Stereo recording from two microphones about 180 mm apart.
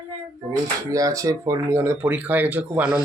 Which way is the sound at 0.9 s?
20° right (ahead or behind).